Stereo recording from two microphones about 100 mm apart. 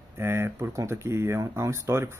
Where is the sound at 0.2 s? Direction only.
25° right (ahead or behind).